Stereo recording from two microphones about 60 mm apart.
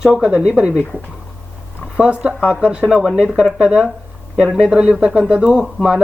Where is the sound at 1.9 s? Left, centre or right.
Centre.